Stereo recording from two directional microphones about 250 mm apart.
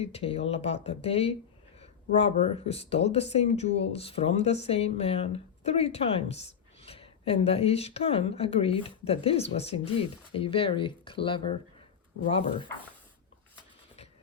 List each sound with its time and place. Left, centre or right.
0.0 s speech: left